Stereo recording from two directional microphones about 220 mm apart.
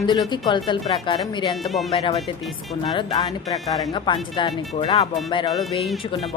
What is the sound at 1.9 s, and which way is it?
Speech, 25° left (ahead or behind).